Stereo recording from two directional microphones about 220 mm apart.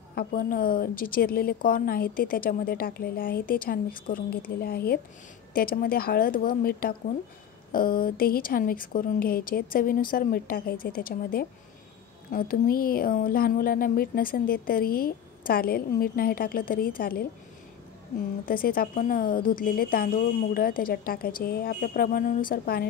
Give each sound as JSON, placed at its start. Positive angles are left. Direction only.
{"t": 0.1, "sound": "a woman's voice", "side_deg": 40}
{"t": 18.4, "sound": "a woman's voice", "side_deg": 40}